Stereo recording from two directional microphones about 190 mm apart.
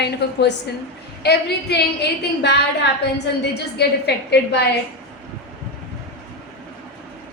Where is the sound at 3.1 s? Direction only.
60° left (ahead or behind).